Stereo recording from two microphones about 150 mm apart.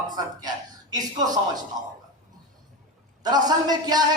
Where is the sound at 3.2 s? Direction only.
25° right (ahead or behind).